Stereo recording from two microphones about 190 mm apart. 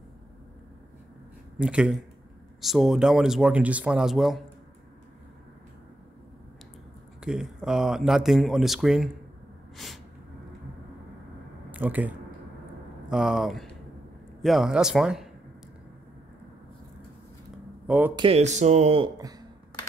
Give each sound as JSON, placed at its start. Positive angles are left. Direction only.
{"t": 1.6, "sound": "speech", "side_deg": -5}
{"t": 7.2, "sound": "speech", "side_deg": -5}
{"t": 11.7, "sound": "speech", "side_deg": -10}
{"t": 17.8, "sound": "speech", "side_deg": -10}
{"t": 18.1, "sound": "speech", "side_deg": -30}